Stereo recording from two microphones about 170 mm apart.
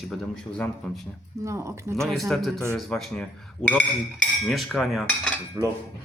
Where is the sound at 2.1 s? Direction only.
Centre (ahead or behind).